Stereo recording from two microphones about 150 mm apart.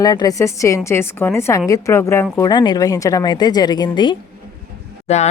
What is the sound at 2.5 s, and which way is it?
Speech, 30° left (ahead or behind).